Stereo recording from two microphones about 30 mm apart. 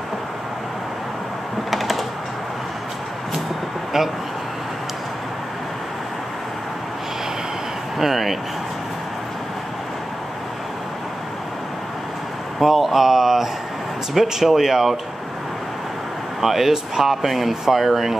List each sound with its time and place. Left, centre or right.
1.7 s typing: centre
8.0 s speech: centre
12.5 s a sound: centre
14.1 s speech: centre
16.3 s speech: centre